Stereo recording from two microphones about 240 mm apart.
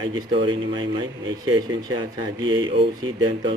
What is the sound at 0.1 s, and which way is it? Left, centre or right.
A man's voice, centre.